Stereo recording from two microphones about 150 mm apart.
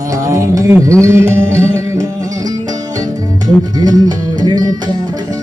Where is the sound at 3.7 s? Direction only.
25° right (ahead or behind).